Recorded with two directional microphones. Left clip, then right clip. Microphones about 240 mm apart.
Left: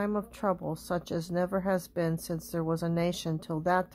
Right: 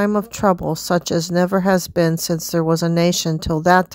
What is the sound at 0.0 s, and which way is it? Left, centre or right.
Speech, right.